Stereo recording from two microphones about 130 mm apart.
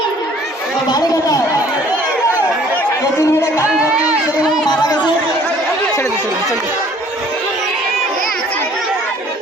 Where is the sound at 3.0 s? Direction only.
25° left (ahead or behind).